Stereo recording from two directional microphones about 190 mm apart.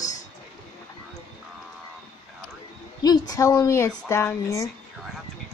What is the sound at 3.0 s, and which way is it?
A woman's voice, 20° left (ahead or behind).